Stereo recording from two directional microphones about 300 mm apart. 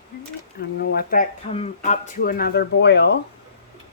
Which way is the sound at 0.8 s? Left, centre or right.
Left.